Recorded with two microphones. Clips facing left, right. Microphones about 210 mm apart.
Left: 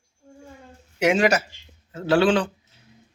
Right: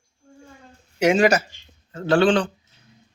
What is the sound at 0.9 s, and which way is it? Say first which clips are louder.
Speech: right 2 dB; 40° right (ahead or behind).